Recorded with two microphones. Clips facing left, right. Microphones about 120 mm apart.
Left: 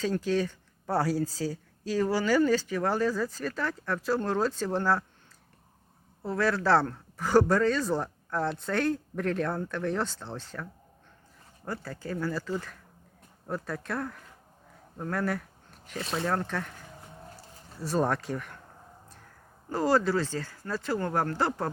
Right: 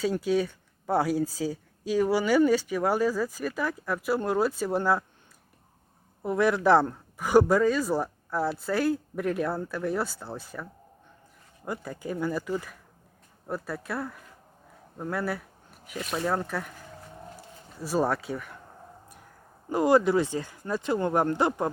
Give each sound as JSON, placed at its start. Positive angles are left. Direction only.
{"t": 0.0, "sound": "speech", "side_deg": -10}
{"t": 6.2, "sound": "speech", "side_deg": -15}
{"t": 14.9, "sound": "a sound", "side_deg": -5}
{"t": 16.1, "sound": "speech", "side_deg": -5}
{"t": 17.3, "sound": "bird", "side_deg": -10}
{"t": 19.7, "sound": "speech", "side_deg": -15}